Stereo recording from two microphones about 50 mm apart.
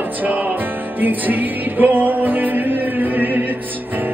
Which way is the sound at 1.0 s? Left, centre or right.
Right.